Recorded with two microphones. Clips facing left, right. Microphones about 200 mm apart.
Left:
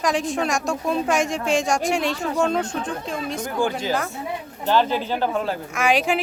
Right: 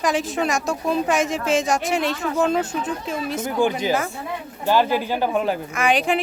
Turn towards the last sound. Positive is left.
turn(degrees=0)  # may be behind; listen again after turning